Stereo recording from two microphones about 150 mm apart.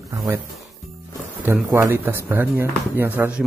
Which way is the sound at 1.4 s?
15° right (ahead or behind).